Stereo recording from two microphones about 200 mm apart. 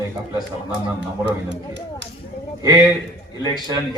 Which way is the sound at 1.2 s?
60° right (ahead or behind).